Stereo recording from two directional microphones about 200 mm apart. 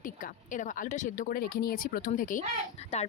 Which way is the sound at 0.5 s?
40° left (ahead or behind).